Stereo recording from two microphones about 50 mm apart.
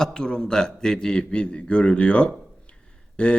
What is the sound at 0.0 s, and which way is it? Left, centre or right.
A man's voice, centre.